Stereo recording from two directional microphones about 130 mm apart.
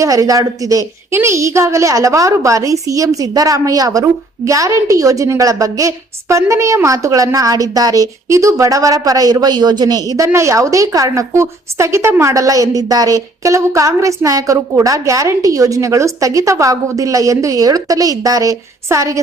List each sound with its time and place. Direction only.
0.0 s a woman's voice: 25° right (ahead or behind)